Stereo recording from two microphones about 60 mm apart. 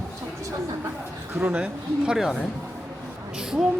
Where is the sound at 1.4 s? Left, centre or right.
Centre.